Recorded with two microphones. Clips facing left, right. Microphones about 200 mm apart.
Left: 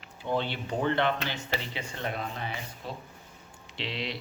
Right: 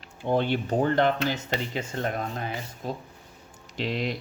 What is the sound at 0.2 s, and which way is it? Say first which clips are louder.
Speech: right 6 dB; 50° right (ahead or behind).